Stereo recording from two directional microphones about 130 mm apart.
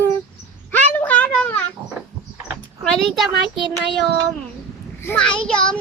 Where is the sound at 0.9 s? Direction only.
15° left (ahead or behind).